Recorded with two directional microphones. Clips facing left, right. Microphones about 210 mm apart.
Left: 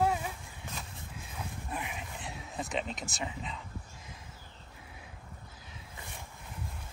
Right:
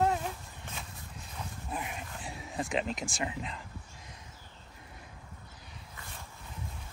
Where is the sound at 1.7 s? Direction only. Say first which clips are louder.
Right 2 dB; centre (ahead or behind).